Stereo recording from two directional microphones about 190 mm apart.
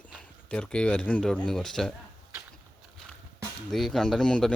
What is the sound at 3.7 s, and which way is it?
Speech, centre (ahead or behind).